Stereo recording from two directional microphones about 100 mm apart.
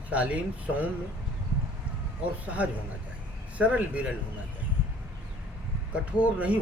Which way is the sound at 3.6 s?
15° right (ahead or behind).